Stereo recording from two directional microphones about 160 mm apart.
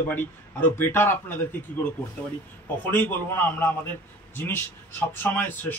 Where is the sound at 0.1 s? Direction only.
10° left (ahead or behind).